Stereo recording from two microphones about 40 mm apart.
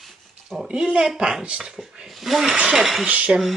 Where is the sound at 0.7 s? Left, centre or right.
Right.